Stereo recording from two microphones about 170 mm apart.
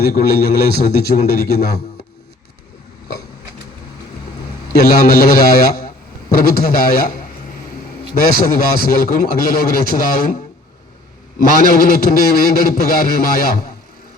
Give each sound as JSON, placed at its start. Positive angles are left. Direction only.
{"t": 0.0, "sound": "a man's voice", "side_deg": 65}
{"t": 4.7, "sound": "a man's voice", "side_deg": 65}
{"t": 8.3, "sound": "a man's voice", "side_deg": 60}
{"t": 11.3, "sound": "a man's voice", "side_deg": 60}